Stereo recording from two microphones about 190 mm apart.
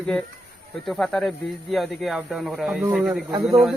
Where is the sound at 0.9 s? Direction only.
Centre (ahead or behind).